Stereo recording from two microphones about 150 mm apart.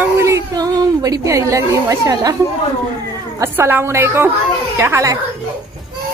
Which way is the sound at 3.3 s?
15° right (ahead or behind).